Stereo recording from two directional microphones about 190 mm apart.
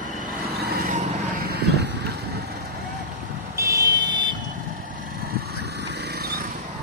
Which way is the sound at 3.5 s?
15° right (ahead or behind).